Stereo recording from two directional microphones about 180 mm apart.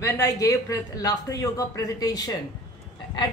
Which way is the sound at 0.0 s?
20° left (ahead or behind).